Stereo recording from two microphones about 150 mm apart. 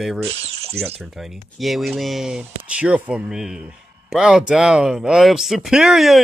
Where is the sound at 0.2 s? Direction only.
40° right (ahead or behind).